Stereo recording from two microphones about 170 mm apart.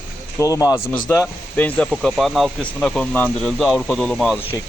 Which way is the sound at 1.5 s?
10° left (ahead or behind).